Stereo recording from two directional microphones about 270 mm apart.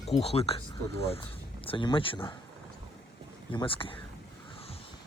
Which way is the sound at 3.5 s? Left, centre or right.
Centre.